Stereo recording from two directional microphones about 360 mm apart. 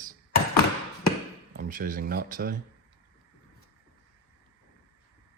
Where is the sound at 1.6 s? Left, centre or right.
Right.